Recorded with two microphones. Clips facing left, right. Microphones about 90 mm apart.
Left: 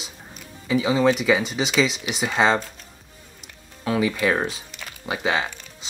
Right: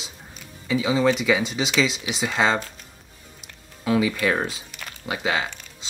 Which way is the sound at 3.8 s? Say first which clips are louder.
Even; 5° right (ahead or behind).